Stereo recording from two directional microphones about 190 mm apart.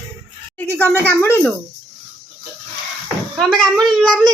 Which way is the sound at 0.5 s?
10° left (ahead or behind).